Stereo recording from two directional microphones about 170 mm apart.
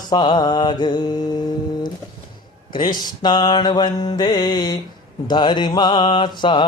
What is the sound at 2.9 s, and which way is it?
Mantra, 25° left (ahead or behind).